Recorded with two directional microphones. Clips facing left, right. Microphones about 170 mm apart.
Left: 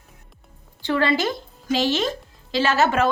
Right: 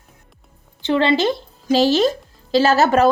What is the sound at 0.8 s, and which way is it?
A woman's voice, 20° right (ahead or behind).